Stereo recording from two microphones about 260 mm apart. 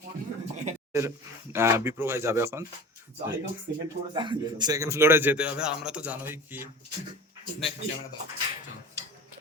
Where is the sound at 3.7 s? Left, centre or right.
Right.